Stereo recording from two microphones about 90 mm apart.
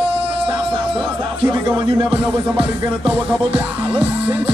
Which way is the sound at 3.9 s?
15° right (ahead or behind).